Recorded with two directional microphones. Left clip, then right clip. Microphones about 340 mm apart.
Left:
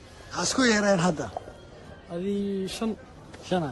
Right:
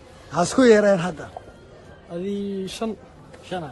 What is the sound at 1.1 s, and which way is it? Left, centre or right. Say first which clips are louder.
Speech: left 3 dB; centre.